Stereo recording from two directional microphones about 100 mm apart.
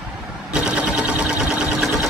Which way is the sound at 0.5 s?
10° right (ahead or behind).